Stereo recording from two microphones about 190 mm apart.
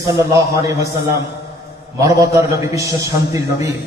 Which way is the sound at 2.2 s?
15° right (ahead or behind).